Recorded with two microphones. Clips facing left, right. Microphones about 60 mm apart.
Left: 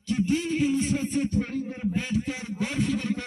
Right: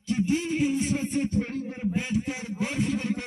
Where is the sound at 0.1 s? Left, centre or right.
Right.